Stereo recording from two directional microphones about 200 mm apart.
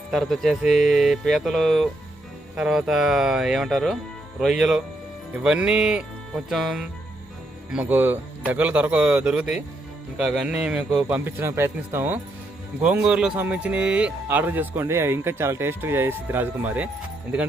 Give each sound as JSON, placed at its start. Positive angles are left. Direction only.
{"t": 0.1, "sound": "speech", "side_deg": 0}